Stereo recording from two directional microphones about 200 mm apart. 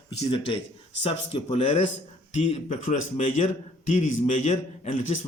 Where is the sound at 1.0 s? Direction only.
30° left (ahead or behind).